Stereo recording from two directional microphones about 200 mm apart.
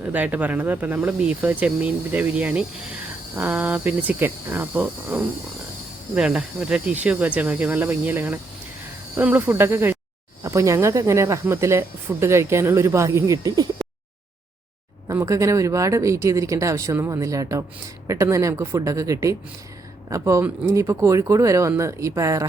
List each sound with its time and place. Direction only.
0.0 s speech: 10° right (ahead or behind)
15.0 s speech: 15° right (ahead or behind)